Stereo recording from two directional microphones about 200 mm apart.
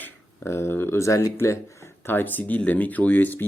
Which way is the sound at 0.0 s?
10° left (ahead or behind).